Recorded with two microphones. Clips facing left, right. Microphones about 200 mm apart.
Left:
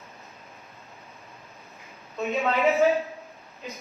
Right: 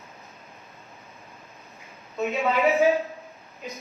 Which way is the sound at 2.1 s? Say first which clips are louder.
Right 1 dB; centre (ahead or behind).